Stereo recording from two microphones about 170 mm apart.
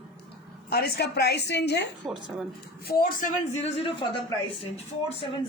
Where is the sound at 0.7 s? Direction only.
70° left (ahead or behind); by 1.9 s 90° left.